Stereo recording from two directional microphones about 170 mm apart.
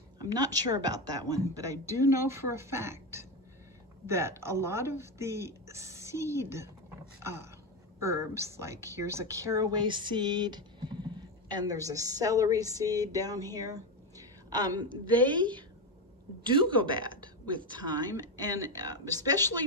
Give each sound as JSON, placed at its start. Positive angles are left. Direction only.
{"t": 0.2, "sound": "a woman's voice", "side_deg": -20}